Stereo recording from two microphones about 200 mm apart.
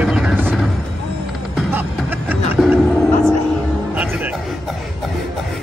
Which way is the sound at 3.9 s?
5° right (ahead or behind).